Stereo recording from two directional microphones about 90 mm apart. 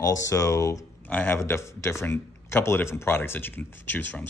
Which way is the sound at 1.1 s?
20° left (ahead or behind).